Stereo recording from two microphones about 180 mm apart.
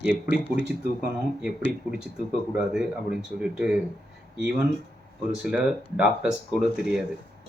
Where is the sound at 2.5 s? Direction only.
5° right (ahead or behind).